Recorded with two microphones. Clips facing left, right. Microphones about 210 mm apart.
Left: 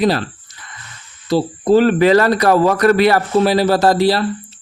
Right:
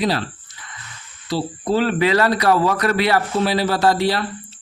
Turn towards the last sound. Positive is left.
turn(degrees=35)  # may be behind; listen again after turning